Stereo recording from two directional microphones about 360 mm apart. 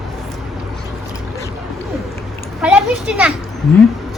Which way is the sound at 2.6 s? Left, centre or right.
Centre.